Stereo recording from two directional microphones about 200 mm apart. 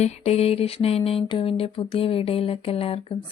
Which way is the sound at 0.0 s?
30° left (ahead or behind).